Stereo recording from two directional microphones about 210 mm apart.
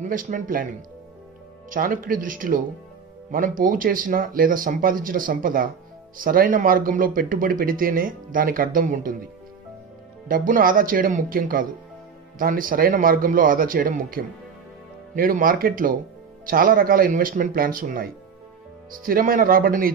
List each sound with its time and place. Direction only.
0.0 s speech: 40° right (ahead or behind)
10.2 s speech: 40° right (ahead or behind)